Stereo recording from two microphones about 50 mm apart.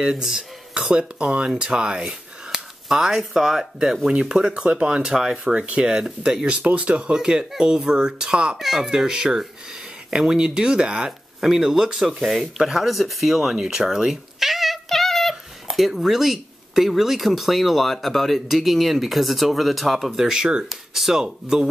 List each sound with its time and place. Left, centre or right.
0.0 s speech: centre
6.5 s speech: right
8.6 s speech: centre
8.9 s speech: centre